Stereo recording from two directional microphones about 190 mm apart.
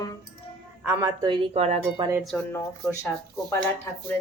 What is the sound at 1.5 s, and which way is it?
Wind chime, 35° right (ahead or behind).